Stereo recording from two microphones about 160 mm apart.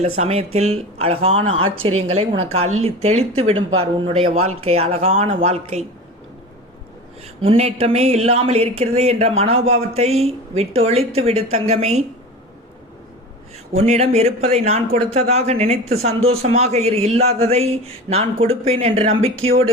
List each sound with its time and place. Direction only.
0.0 s speech: 40° right (ahead or behind)
7.4 s speech: 40° right (ahead or behind)
13.7 s speech: 40° right (ahead or behind)